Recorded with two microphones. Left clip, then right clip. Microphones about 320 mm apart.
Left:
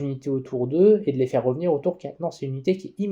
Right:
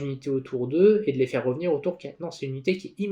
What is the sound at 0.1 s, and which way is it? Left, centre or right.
Speech, left.